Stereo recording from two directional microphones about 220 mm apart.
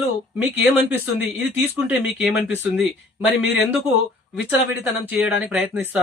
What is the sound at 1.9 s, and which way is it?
Speech, centre (ahead or behind).